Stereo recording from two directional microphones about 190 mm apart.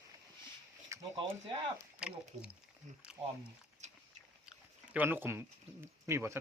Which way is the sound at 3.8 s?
35° right (ahead or behind).